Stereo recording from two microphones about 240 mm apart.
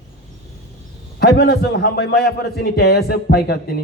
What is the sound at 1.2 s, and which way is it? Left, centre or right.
A man's voice, left.